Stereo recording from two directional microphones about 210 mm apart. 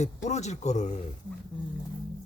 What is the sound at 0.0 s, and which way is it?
Speech, 35° left (ahead or behind).